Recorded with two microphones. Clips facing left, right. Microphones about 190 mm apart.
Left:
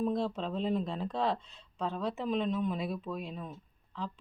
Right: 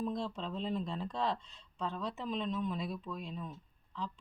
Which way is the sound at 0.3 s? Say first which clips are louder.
Left 5 dB; 5° left (ahead or behind).